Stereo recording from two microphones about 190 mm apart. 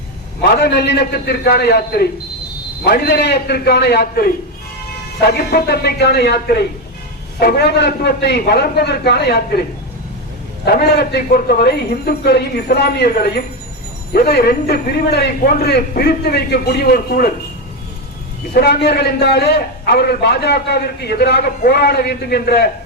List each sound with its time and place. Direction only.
0.4 s a man's voice: 60° left (ahead or behind)
5.3 s a man's voice: 55° left (ahead or behind)
10.7 s a man's voice: 60° left (ahead or behind)
18.5 s a man's voice: 55° left (ahead or behind)